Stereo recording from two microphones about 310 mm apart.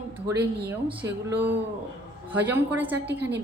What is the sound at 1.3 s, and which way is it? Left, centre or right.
Speech, right.